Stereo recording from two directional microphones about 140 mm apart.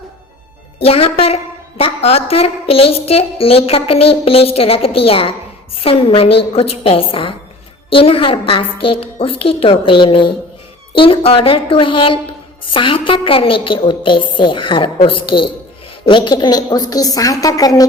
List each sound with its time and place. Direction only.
0.8 s a woman's voice: 45° left (ahead or behind); by 17.8 s 25° left (ahead or behind)